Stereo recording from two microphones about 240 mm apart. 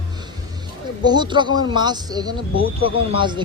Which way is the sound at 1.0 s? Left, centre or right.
Centre.